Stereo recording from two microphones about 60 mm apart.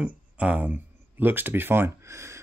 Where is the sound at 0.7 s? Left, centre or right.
Right.